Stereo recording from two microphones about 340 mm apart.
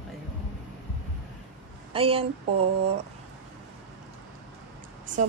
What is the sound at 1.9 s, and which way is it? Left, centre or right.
Speech, centre.